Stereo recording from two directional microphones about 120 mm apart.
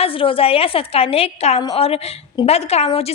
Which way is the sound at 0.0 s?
50° left (ahead or behind).